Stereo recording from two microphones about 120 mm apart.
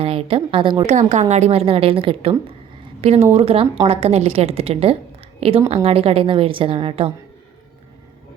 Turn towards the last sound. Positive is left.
turn(degrees=-50)  # may be behind; listen again after turning